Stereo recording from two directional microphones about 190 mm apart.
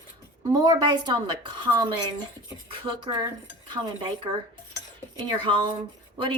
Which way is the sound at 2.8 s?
25° right (ahead or behind).